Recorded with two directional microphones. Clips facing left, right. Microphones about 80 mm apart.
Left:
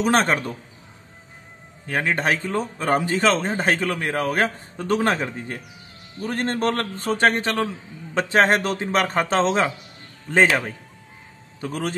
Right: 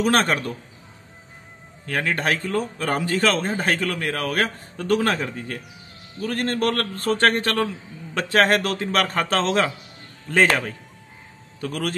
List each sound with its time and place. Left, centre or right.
0.0 s a man's voice: left
1.9 s a man's voice: left
11.6 s a man's voice: left